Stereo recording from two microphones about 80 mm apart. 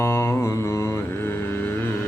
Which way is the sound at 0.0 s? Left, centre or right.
Left.